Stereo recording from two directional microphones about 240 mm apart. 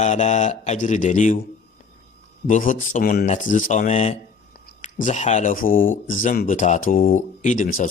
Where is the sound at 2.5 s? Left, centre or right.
Left.